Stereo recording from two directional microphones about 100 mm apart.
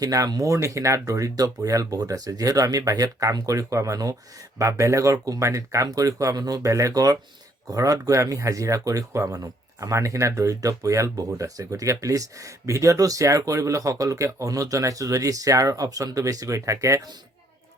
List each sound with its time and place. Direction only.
0.0 s speech: 35° right (ahead or behind)